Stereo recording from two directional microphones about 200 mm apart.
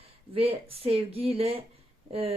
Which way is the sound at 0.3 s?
30° right (ahead or behind).